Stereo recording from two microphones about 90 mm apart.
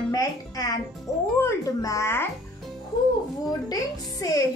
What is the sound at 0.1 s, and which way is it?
Speech, 45° left (ahead or behind).